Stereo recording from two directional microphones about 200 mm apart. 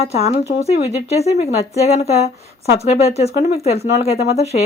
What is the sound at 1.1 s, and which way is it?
A woman's voice, 30° left (ahead or behind).